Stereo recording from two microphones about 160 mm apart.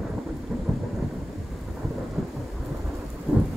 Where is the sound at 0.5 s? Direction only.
10° right (ahead or behind).